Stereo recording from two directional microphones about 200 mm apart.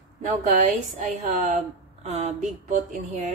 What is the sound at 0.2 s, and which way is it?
A woman's voice, 35° right (ahead or behind).